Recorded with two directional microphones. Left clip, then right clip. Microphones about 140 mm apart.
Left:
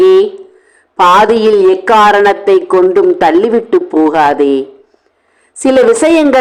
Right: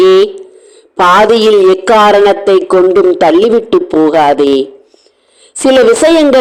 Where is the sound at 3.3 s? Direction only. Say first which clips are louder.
Right 2 dB; 25° right (ahead or behind).